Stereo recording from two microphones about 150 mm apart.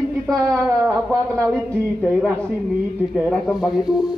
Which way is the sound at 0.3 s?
20° right (ahead or behind).